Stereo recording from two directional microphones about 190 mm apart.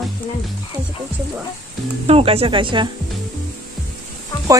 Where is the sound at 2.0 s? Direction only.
30° right (ahead or behind).